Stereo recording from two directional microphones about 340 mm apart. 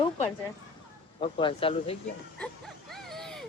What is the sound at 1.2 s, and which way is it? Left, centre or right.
Speech, centre.